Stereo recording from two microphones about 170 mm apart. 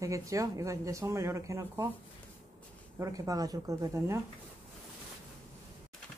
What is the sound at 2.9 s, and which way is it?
Speech, 20° right (ahead or behind).